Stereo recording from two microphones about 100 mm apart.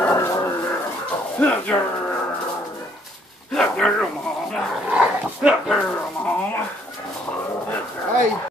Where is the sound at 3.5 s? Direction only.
5° left (ahead or behind).